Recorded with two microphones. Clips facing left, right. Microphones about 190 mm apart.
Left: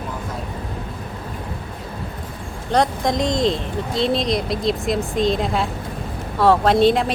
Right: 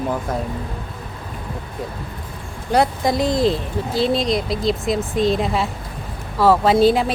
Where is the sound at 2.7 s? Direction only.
5° right (ahead or behind).